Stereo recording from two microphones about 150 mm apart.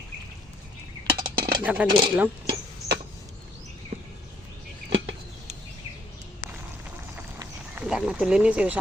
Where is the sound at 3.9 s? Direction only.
85° right.